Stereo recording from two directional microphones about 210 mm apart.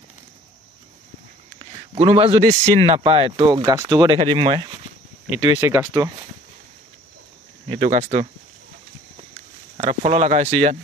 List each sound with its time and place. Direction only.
1.6 s a man's voice: 30° right (ahead or behind)
5.6 s speech: 10° right (ahead or behind)
7.6 s speech: 30° right (ahead or behind)
9.1 s a sound: 30° right (ahead or behind)